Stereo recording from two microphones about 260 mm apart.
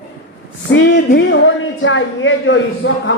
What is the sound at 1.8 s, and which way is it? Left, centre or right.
A man's voice, left.